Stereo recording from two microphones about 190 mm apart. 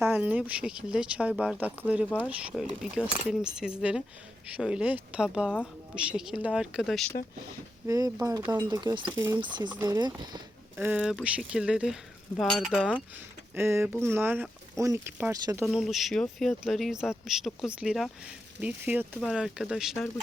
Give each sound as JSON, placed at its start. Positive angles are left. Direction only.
{"t": 0.0, "sound": "speech", "side_deg": -10}
{"t": 7.9, "sound": "speech", "side_deg": -20}
{"t": 10.8, "sound": "speech", "side_deg": -10}
{"t": 15.6, "sound": "speech", "side_deg": -5}